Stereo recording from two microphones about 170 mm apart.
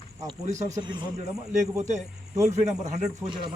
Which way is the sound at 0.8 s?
25° right (ahead or behind).